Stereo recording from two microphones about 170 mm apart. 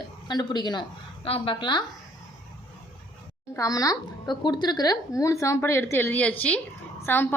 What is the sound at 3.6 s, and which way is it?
A woman's voice, 20° left (ahead or behind).